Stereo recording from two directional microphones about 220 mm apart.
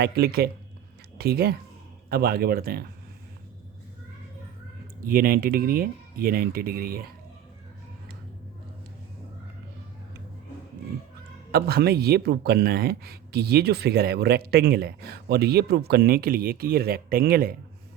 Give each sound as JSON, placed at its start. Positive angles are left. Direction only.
{"t": 0.0, "sound": "speech", "side_deg": -45}
{"t": 5.0, "sound": "speech", "side_deg": -40}
{"t": 11.5, "sound": "speech", "side_deg": -45}